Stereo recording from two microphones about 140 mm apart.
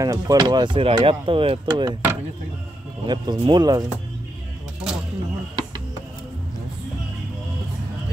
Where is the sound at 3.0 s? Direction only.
35° right (ahead or behind).